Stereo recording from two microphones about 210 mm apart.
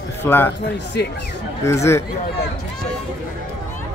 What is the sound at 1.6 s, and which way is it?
Speech, 15° left (ahead or behind).